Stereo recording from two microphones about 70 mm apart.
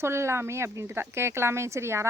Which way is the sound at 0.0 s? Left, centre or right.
Right.